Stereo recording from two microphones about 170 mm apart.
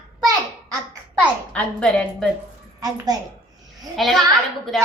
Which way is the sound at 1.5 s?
5° left (ahead or behind).